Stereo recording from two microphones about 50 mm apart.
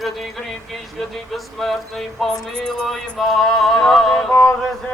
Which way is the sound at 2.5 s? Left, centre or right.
Centre.